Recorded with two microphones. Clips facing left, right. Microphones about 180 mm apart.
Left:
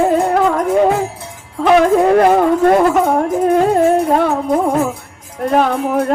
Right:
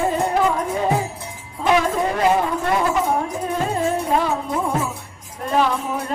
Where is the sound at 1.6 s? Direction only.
65° left (ahead or behind).